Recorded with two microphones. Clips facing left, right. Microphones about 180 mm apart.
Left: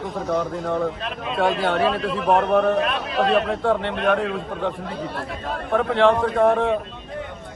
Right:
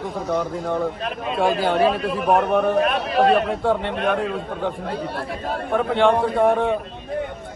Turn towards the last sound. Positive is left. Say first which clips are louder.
# even
turn(degrees=0)  # may be behind; listen again after turning